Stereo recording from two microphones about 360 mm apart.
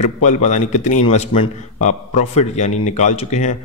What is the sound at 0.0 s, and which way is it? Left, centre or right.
A man's voice, centre.